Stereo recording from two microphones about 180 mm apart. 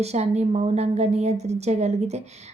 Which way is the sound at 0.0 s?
35° right (ahead or behind).